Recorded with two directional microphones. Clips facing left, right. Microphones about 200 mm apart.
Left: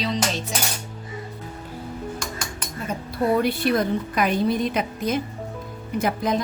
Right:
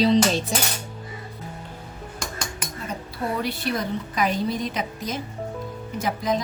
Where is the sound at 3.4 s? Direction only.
55° left (ahead or behind).